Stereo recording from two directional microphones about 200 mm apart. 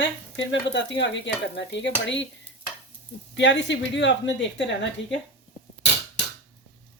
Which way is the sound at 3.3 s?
65° left (ahead or behind).